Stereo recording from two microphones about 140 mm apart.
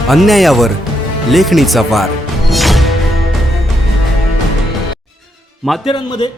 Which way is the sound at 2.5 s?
Centre (ahead or behind).